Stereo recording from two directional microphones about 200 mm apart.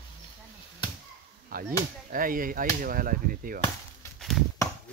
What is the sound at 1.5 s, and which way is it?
Speech, 50° right (ahead or behind).